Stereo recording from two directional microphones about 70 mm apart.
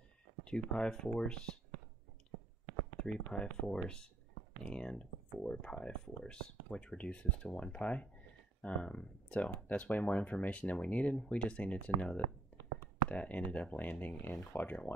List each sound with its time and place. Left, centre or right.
0.4 s speech: centre
3.0 s speech: centre
13.1 s speech: centre